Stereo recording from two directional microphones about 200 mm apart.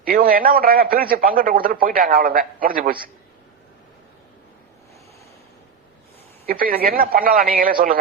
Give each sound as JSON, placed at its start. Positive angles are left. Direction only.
{"t": 0.0, "sound": "a man's voice", "side_deg": -45}
{"t": 6.4, "sound": "a man's voice", "side_deg": -45}